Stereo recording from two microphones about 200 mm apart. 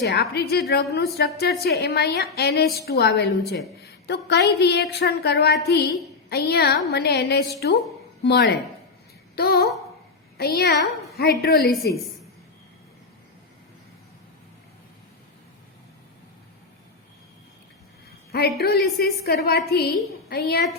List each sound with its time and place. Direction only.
0.0 s a woman's voice: 55° left (ahead or behind)
9.3 s a sound: 50° left (ahead or behind)
10.3 s a woman's voice: 50° left (ahead or behind)
18.3 s a woman's voice: 50° left (ahead or behind)